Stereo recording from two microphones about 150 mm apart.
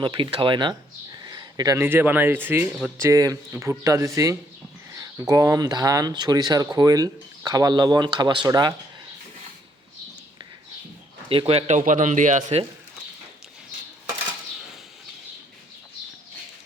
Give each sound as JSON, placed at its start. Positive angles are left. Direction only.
{"t": 0.0, "sound": "speech", "side_deg": -35}
{"t": 11.3, "sound": "speech", "side_deg": -40}